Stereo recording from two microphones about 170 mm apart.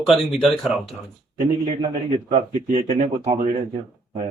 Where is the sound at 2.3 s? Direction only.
40° right (ahead or behind).